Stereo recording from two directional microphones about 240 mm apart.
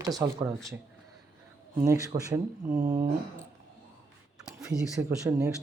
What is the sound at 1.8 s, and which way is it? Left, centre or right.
Speech, centre.